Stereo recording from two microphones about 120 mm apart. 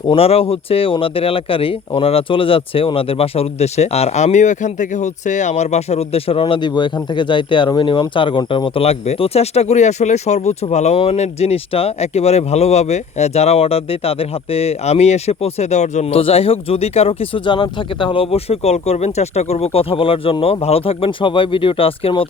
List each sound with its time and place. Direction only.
0.1 s speech: 55° left (ahead or behind)